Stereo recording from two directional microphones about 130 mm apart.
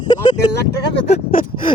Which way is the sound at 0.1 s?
35° left (ahead or behind).